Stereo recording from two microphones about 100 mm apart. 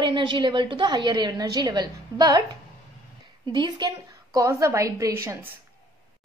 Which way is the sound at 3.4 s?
45° right (ahead or behind).